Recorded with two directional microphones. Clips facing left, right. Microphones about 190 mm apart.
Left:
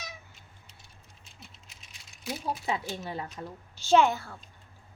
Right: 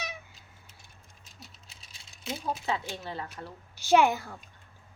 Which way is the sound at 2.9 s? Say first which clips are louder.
Left 2 dB; 15° left (ahead or behind).